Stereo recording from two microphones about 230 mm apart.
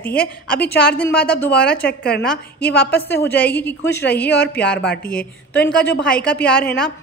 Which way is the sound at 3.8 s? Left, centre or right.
Left.